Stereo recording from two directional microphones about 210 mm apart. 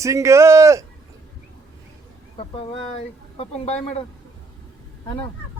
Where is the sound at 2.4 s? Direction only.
25° left (ahead or behind).